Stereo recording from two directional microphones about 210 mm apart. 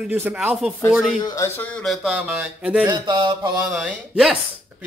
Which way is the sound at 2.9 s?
25° right (ahead or behind).